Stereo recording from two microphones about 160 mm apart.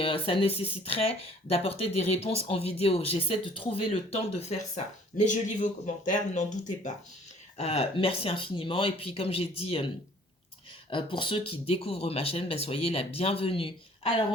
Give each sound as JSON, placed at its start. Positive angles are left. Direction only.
{"t": 0.0, "sound": "speech", "side_deg": 35}
{"t": 10.8, "sound": "speech", "side_deg": 30}